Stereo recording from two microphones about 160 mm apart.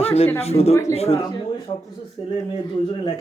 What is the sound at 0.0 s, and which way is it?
A man's voice, 40° left (ahead or behind).